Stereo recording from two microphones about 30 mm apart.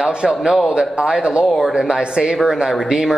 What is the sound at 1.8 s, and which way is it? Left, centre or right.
A man's voice, right.